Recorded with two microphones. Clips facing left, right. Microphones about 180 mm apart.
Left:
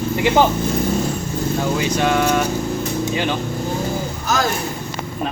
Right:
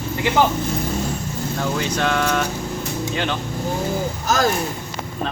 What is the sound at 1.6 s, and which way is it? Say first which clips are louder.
Speech: left 2 dB; 10° left (ahead or behind).